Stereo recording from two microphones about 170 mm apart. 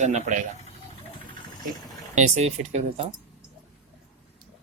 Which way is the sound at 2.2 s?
40° right (ahead or behind).